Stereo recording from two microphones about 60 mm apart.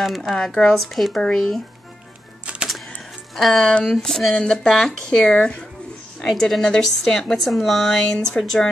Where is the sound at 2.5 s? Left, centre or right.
Centre.